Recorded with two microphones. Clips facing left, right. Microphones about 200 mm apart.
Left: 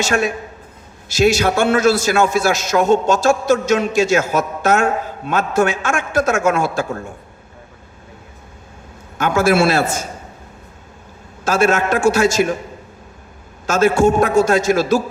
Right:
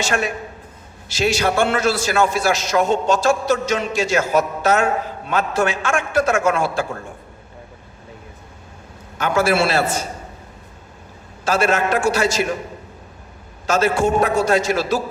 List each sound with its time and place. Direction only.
0.0 s a man's voice: 45° left (ahead or behind)
9.1 s a man's voice: 45° left (ahead or behind)
11.4 s a man's voice: 45° left (ahead or behind)
13.7 s a man's voice: 45° left (ahead or behind)